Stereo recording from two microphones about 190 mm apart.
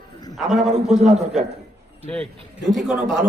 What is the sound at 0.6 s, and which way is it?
Speech, 35° right (ahead or behind).